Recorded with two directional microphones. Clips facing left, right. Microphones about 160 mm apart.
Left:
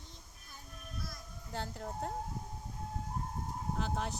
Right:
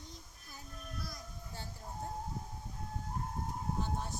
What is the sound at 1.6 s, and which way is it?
Speech, 75° left (ahead or behind).